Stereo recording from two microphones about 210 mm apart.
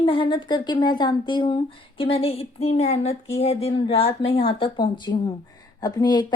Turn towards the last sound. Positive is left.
turn(degrees=20)  # may be behind; listen again after turning